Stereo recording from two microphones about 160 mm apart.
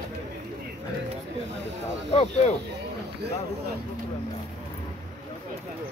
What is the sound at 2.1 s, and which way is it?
Speech, 35° left (ahead or behind).